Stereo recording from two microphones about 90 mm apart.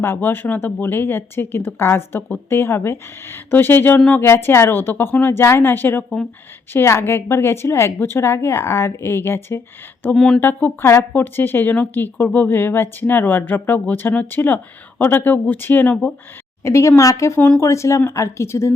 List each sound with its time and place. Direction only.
0.0 s a woman's voice: 25° left (ahead or behind)
10.2 s speech: 5° left (ahead or behind)
10.4 s a woman's voice: 25° left (ahead or behind)
16.6 s a woman's voice: 30° left (ahead or behind)